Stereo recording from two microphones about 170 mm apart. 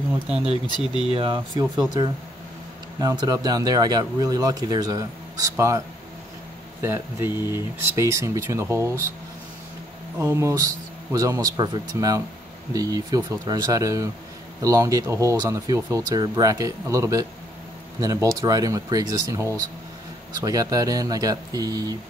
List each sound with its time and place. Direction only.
0.7 s speech: 25° left (ahead or behind)
1.0 s speech: 30° right (ahead or behind)
3.0 s speech: 20° right (ahead or behind)
6.8 s speech: 15° right (ahead or behind)
10.1 s speech: 10° right (ahead or behind)